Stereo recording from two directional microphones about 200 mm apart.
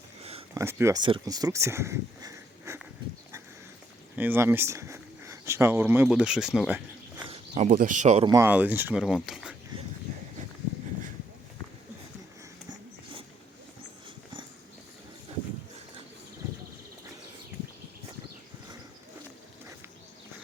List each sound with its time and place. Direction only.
0.2 s a sound: 30° right (ahead or behind)
0.5 s speech: 15° right (ahead or behind)
4.1 s speech: 10° right (ahead or behind)
7.3 s a sound: 30° right (ahead or behind)
7.8 s speech: 40° right (ahead or behind)
8.3 s speech: 10° right (ahead or behind)